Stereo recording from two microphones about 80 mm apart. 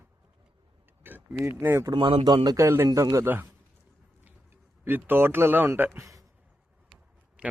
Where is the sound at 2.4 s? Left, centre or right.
Right.